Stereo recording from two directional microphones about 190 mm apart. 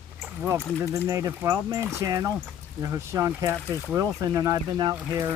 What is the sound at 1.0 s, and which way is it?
Speech, 15° right (ahead or behind).